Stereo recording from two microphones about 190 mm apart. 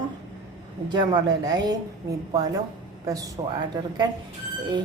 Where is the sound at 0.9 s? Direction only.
20° right (ahead or behind).